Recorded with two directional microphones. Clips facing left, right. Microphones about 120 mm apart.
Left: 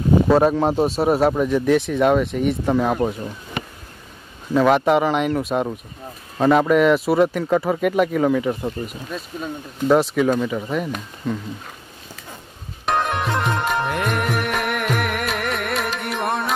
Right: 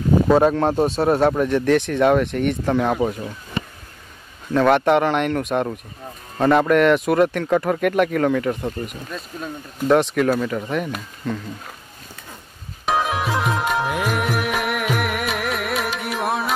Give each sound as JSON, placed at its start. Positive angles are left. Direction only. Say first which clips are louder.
{"t": 0.3, "sound": "speech", "louder": "right 2 dB", "side_deg": 0}
{"t": 4.6, "sound": "speech", "louder": "even", "side_deg": 5}
{"t": 12.8, "sound": "music", "louder": "even", "side_deg": 0}